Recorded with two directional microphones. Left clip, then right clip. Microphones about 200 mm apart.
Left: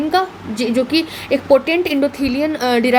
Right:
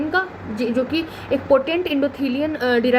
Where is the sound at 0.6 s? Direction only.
35° left (ahead or behind).